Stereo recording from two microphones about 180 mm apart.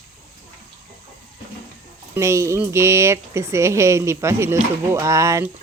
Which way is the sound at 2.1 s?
15° right (ahead or behind).